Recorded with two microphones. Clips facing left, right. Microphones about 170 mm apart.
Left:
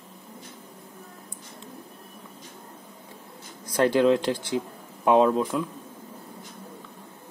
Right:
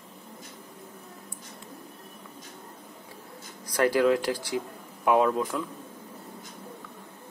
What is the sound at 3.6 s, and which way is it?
Speech, 25° left (ahead or behind).